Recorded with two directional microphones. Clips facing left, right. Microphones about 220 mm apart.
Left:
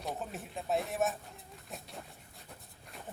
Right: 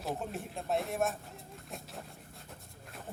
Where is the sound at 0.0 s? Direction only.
Centre (ahead or behind).